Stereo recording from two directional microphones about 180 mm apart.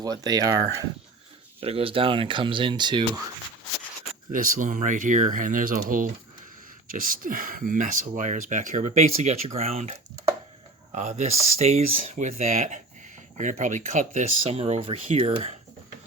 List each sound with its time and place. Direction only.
0.0 s speech: 20° right (ahead or behind)
1.6 s speech: 30° right (ahead or behind)
4.3 s speech: 45° right (ahead or behind); by 15.5 s 30° right (ahead or behind)